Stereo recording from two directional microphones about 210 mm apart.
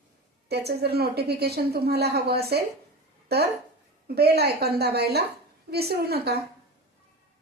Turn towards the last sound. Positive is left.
turn(degrees=-50)  # may be behind; listen again after turning